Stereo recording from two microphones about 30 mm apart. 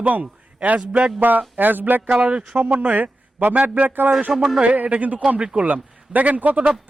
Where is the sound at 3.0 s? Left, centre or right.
Right.